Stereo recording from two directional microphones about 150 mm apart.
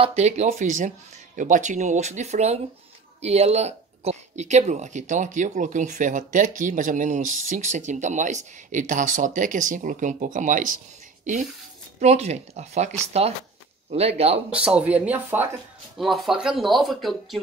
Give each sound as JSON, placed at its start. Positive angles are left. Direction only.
{"t": 0.0, "sound": "speech", "side_deg": -45}
{"t": 12.0, "sound": "speech", "side_deg": -45}
{"t": 14.5, "sound": "speech", "side_deg": -5}
{"t": 16.0, "sound": "speech", "side_deg": 0}